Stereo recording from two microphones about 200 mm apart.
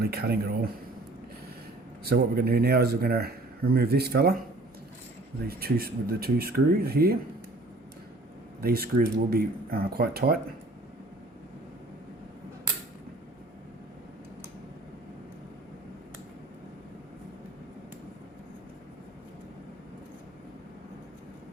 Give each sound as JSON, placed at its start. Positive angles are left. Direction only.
{"t": 0.0, "sound": "speech", "side_deg": -50}
{"t": 2.0, "sound": "speech", "side_deg": -50}
{"t": 5.5, "sound": "speech", "side_deg": -50}
{"t": 8.6, "sound": "speech", "side_deg": -50}